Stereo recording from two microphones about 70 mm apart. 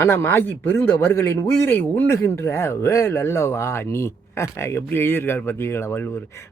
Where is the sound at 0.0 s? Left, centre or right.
Left.